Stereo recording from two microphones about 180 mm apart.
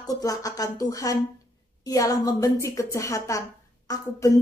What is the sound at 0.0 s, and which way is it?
A woman's voice, 20° left (ahead or behind).